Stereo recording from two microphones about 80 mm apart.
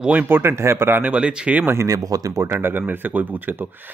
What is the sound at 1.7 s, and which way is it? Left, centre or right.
Speech, right.